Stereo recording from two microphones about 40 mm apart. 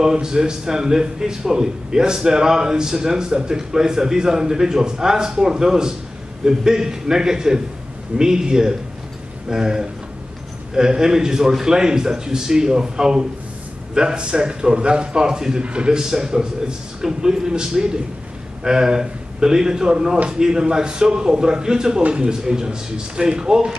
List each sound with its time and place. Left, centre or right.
0.0 s a man's voice: centre
16.0 s a man's voice: centre